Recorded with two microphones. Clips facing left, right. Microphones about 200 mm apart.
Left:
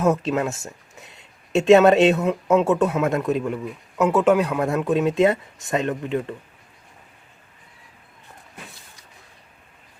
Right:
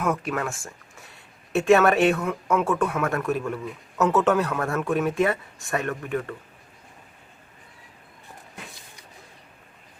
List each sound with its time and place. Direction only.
0.0 s speech: 25° left (ahead or behind)